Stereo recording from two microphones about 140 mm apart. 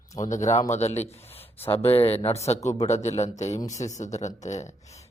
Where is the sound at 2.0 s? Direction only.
45° left (ahead or behind).